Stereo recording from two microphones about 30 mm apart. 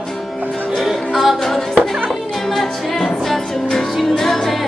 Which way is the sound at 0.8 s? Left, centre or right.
Centre.